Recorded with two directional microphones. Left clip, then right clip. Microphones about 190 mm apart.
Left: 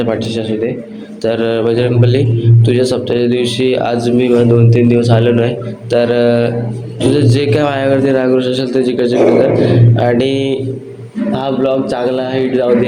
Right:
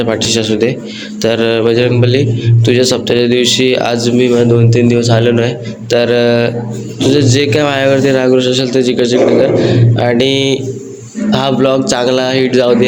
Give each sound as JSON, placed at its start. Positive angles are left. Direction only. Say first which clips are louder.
{"t": 0.0, "sound": "a man's voice", "louder": "right 2 dB", "side_deg": -10}
{"t": 0.3, "sound": "a man's voice", "louder": "right 5 dB", "side_deg": -20}
{"t": 1.2, "sound": "a man's voice", "louder": "right 2 dB", "side_deg": -10}